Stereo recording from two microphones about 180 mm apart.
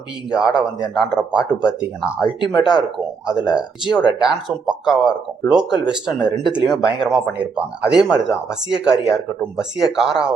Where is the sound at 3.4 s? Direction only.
5° right (ahead or behind).